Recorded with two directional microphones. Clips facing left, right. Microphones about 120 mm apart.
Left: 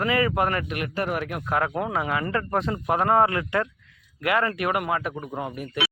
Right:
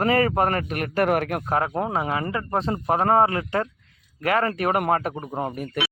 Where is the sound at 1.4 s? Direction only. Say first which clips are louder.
Right 1 dB; 30° right (ahead or behind).